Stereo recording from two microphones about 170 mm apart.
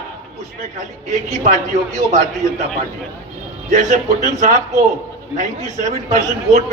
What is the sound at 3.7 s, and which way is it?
Speech, 50° right (ahead or behind).